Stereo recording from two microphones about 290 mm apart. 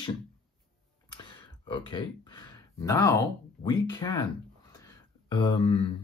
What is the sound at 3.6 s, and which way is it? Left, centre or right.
Speech, centre.